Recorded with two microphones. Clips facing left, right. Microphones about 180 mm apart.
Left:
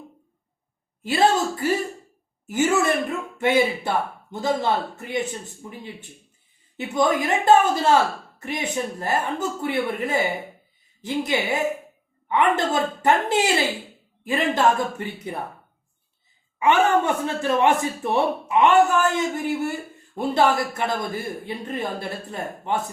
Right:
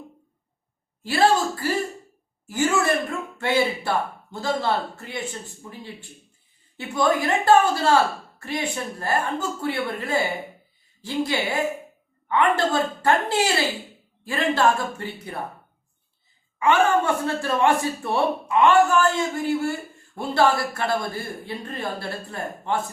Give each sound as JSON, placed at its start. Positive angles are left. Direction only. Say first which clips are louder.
{"t": 1.0, "sound": "a sound", "louder": "even", "side_deg": 20}
{"t": 2.5, "sound": "speech", "louder": "left 1 dB", "side_deg": 20}
{"t": 16.6, "sound": "speech", "louder": "left 1 dB", "side_deg": 20}